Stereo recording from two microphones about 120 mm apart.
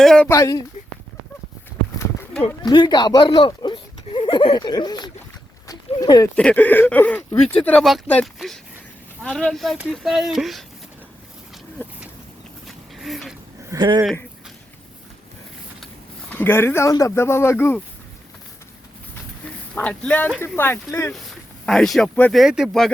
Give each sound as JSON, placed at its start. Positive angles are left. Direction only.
{"t": 0.0, "sound": "speech", "side_deg": 5}
{"t": 0.3, "sound": "speech", "side_deg": 25}
{"t": 2.6, "sound": "speech", "side_deg": 40}
{"t": 5.6, "sound": "a sound", "side_deg": 30}
{"t": 6.3, "sound": "speech", "side_deg": 10}
{"t": 12.6, "sound": "a sound", "side_deg": 0}
{"t": 13.7, "sound": "speech", "side_deg": -40}
{"t": 16.3, "sound": "speech", "side_deg": 20}
{"t": 19.7, "sound": "speech", "side_deg": 15}
{"t": 21.7, "sound": "speech", "side_deg": 0}